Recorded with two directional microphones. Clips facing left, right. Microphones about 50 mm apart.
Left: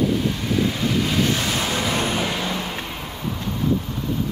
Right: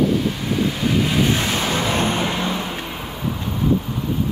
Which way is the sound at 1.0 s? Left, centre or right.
Centre.